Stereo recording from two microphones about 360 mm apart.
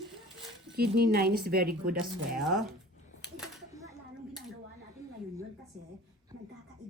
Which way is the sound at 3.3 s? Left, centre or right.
Centre.